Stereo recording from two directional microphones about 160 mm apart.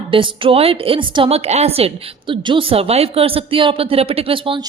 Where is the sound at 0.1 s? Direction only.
30° right (ahead or behind).